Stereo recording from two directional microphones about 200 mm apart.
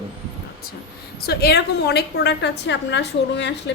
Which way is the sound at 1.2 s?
55° left (ahead or behind).